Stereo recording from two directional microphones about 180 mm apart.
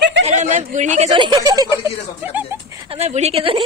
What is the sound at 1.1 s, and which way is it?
Speech, 25° right (ahead or behind).